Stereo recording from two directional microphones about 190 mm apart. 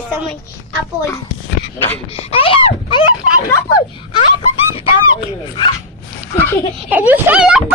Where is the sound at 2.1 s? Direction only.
30° left (ahead or behind).